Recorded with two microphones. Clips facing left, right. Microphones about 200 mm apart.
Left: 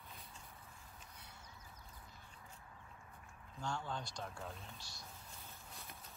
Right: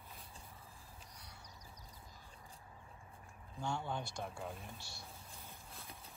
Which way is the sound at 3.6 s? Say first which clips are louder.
Right 3 dB; 20° right (ahead or behind).